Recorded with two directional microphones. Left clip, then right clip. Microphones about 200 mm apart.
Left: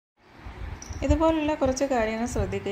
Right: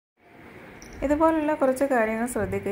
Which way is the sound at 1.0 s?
5° right (ahead or behind).